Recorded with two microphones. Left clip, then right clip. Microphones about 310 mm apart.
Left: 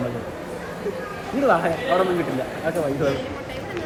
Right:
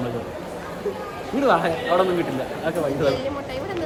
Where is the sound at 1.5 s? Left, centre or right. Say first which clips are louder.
Even; centre.